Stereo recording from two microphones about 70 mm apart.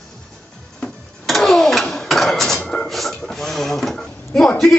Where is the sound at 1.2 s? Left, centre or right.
Centre.